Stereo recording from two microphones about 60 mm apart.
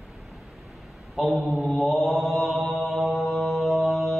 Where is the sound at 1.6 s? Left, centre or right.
Centre.